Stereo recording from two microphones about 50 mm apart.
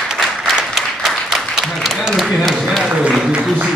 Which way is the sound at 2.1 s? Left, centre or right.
Centre.